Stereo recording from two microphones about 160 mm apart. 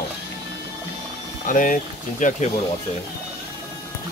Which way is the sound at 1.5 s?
55° left (ahead or behind).